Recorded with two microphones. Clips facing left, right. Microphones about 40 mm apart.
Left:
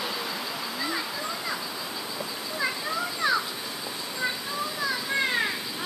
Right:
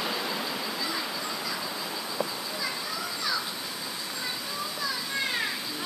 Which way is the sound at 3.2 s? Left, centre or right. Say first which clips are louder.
Left 7 dB; left.